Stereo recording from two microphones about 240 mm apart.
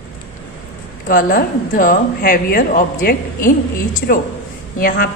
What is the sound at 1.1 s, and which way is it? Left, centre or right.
A woman's voice, left.